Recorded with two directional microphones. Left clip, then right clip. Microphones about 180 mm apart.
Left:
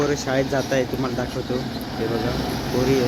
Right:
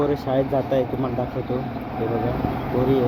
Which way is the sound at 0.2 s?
25° left (ahead or behind).